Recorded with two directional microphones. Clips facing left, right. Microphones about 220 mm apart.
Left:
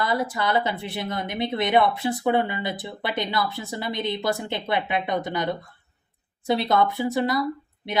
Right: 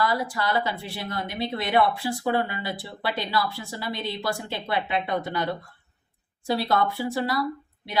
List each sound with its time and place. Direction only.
0.0 s speech: 20° left (ahead or behind)